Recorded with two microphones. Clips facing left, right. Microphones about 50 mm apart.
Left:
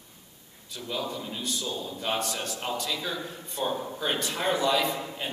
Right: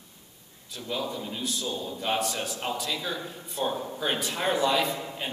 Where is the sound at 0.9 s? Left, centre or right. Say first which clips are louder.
Right 1 dB; centre.